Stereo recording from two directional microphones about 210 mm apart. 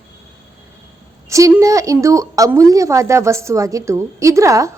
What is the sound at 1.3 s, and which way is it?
A woman's voice, 15° right (ahead or behind).